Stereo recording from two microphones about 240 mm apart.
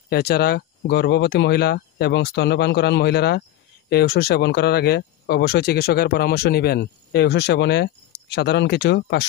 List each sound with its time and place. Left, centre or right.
0.1 s speech: left